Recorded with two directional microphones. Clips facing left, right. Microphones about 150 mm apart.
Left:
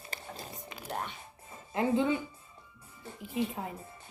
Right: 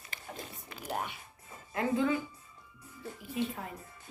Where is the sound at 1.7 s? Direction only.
25° left (ahead or behind).